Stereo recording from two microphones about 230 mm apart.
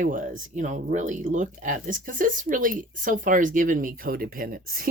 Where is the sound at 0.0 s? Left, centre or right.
Right.